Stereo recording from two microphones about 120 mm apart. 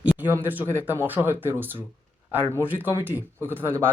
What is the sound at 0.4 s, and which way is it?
Speech, 15° right (ahead or behind).